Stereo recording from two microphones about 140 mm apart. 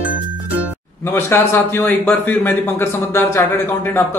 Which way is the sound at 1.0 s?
20° left (ahead or behind).